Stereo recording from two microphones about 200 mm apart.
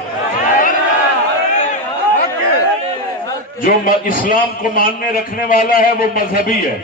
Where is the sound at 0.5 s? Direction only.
40° left (ahead or behind).